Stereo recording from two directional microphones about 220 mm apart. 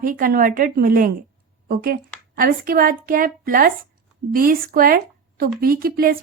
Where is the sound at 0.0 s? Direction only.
40° right (ahead or behind).